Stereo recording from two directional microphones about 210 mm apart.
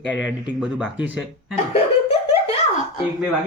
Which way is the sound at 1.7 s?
30° left (ahead or behind).